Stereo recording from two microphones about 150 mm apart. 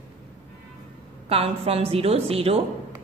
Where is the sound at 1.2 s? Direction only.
40° right (ahead or behind).